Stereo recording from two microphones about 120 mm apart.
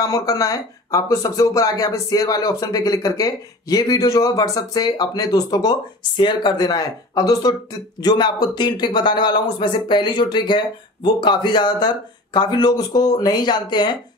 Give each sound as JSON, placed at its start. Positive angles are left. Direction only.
{"t": 0.0, "sound": "speech", "side_deg": 30}